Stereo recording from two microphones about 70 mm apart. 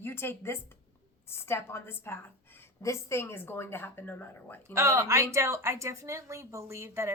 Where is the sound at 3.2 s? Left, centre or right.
Left.